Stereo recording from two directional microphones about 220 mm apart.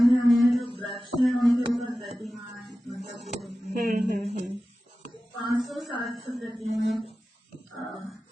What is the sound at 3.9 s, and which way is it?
Speech, 30° right (ahead or behind).